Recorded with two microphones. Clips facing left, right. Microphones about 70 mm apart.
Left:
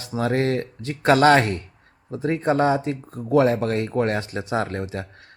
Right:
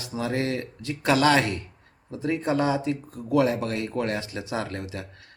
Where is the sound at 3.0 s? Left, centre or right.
Left.